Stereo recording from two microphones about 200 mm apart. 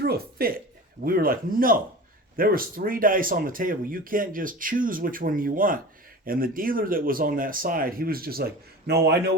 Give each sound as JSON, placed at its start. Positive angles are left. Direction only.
{"t": 0.0, "sound": "speech", "side_deg": -50}